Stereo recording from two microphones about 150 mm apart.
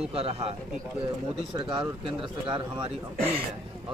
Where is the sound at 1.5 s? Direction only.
30° right (ahead or behind).